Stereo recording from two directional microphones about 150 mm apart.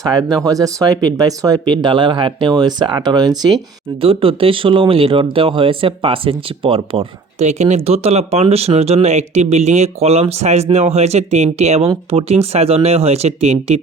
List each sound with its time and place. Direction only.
0.0 s speech: 25° right (ahead or behind)
4.0 s speech: 35° right (ahead or behind)